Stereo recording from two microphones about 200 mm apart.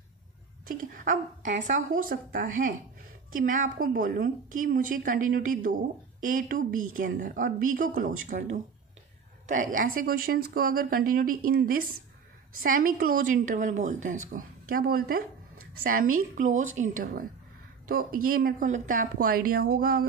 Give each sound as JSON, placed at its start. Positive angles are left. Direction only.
{"t": 0.7, "sound": "a woman's voice", "side_deg": -40}